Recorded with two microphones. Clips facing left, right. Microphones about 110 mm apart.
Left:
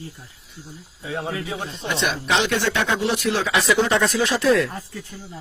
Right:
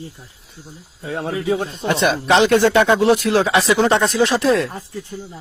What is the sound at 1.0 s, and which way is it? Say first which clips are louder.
Speech: right 6 dB; 50° right (ahead or behind).